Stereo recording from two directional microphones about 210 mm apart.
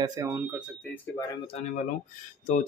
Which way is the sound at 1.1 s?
25° left (ahead or behind).